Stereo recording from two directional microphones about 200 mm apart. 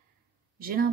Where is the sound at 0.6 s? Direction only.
45° right (ahead or behind).